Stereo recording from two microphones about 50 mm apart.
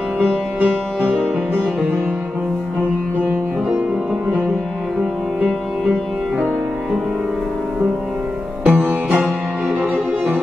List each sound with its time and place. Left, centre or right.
5.9 s music: centre
8.7 s music: right